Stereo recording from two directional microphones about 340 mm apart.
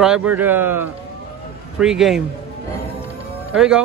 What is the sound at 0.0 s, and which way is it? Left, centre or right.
A man's voice, centre.